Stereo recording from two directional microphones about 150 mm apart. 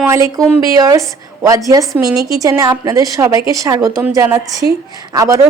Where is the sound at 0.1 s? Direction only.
20° right (ahead or behind).